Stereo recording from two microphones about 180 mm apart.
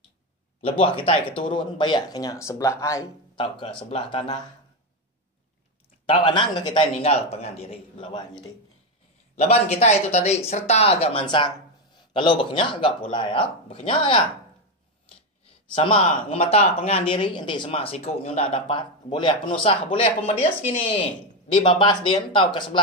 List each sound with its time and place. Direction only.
0.6 s speech: 30° left (ahead or behind)
6.0 s speech: 25° left (ahead or behind)
15.7 s speech: 30° left (ahead or behind)